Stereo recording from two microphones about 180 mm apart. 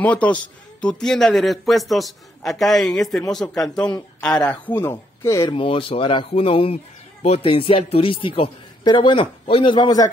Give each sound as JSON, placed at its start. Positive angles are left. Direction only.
{"t": 0.0, "sound": "speech", "side_deg": 10}
{"t": 5.5, "sound": "a man's voice", "side_deg": 30}